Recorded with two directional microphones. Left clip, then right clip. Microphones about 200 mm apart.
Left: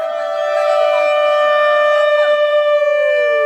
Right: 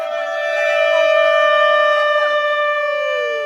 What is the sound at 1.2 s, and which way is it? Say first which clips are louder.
Shofar: even; 60° left (ahead or behind).